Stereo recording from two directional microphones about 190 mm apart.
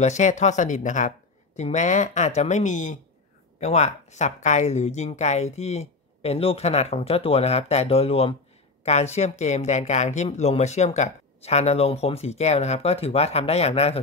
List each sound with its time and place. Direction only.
0.0 s speech: 40° left (ahead or behind)